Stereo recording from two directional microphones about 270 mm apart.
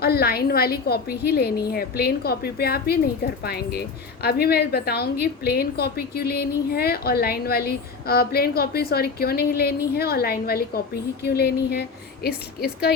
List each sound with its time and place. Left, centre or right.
0.0 s a woman's voice: left